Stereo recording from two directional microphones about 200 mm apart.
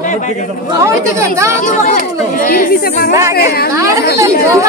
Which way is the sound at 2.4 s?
45° left (ahead or behind).